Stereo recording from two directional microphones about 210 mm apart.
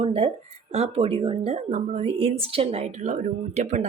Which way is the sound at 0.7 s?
30° right (ahead or behind).